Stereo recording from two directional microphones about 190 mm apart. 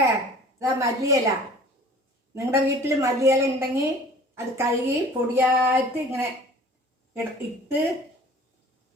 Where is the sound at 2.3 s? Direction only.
15° right (ahead or behind).